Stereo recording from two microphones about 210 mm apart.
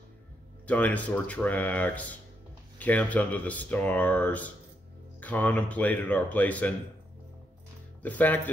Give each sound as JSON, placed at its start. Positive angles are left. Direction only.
{"t": 0.7, "sound": "speech", "side_deg": 5}
{"t": 8.0, "sound": "speech", "side_deg": 10}